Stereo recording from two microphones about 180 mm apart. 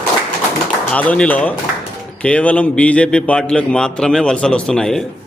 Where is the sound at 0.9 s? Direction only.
5° left (ahead or behind).